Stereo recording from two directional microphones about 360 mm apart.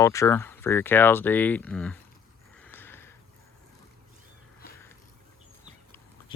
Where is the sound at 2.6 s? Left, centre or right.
Centre.